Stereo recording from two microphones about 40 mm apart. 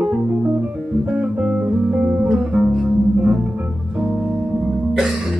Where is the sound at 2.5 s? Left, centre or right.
Centre.